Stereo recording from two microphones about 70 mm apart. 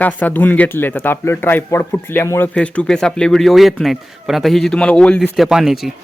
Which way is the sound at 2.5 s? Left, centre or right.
Centre.